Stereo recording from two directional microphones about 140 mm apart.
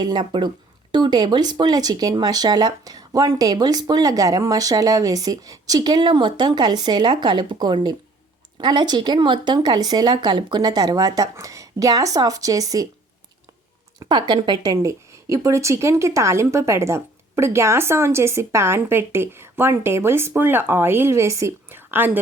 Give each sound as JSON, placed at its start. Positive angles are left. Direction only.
{"t": 0.0, "sound": "a woman's voice", "side_deg": -30}
{"t": 14.0, "sound": "a woman's voice", "side_deg": -30}